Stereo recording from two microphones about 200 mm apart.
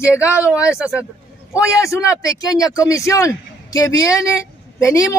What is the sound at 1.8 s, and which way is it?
Speech, 15° left (ahead or behind).